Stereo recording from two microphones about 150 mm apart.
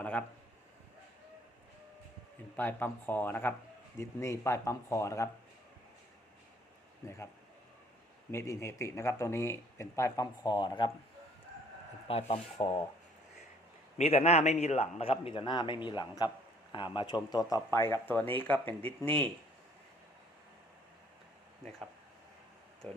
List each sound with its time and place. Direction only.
0.0 s a sound: 10° left (ahead or behind)
2.6 s speech: 15° left (ahead or behind)
7.0 s speech: 20° left (ahead or behind)
8.3 s speech: 20° left (ahead or behind)
12.0 s a man's voice: 40° left (ahead or behind)
12.5 s speech: 30° left (ahead or behind)
14.0 s a man's voice: 45° left (ahead or behind); by 18.6 s 10° left (ahead or behind)